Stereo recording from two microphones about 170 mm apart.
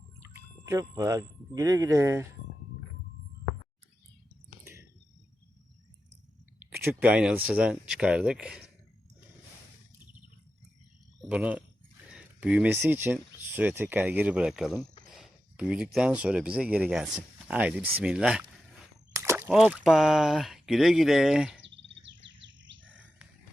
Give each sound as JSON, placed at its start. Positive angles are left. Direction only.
{"t": 0.3, "sound": "speech", "side_deg": -20}
{"t": 4.6, "sound": "a sound", "side_deg": -15}
{"t": 6.7, "sound": "speech", "side_deg": -10}
{"t": 11.2, "sound": "speech", "side_deg": -5}
{"t": 19.1, "sound": "a sound", "side_deg": -15}
{"t": 19.5, "sound": "speech", "side_deg": -5}
{"t": 22.4, "sound": "chirp", "side_deg": -90}